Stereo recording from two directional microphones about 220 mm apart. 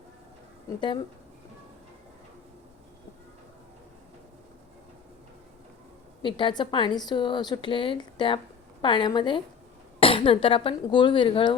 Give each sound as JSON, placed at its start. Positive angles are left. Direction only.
{"t": 6.2, "sound": "a woman's voice", "side_deg": 20}